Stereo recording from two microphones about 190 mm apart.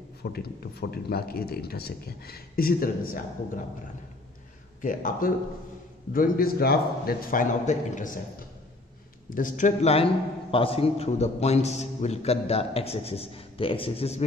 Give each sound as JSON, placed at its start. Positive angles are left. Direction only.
{"t": 0.2, "sound": "speech", "side_deg": 55}
{"t": 4.8, "sound": "speech", "side_deg": 45}
{"t": 9.3, "sound": "a man's voice", "side_deg": 40}